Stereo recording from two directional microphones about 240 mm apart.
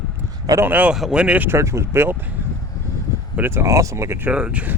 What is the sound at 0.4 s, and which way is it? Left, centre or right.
Speech, centre.